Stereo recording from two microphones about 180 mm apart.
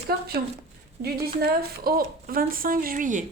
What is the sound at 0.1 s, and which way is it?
A woman's voice, 60° right (ahead or behind).